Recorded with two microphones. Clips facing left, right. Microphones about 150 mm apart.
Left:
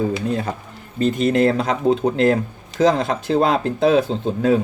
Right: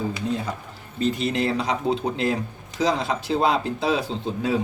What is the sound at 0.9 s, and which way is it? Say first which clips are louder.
Speech: left 6 dB; 50° left (ahead or behind).